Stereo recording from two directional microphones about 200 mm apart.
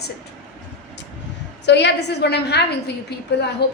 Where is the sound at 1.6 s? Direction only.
60° left (ahead or behind).